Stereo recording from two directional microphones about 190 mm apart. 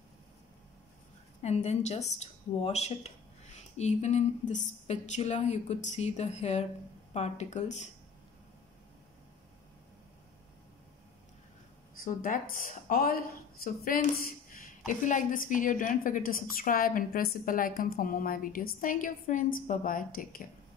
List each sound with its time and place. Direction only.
1.4 s speech: 35° left (ahead or behind)
12.0 s a woman's voice: 45° left (ahead or behind)